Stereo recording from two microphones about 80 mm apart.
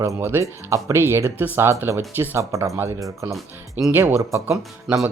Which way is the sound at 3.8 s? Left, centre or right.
Right.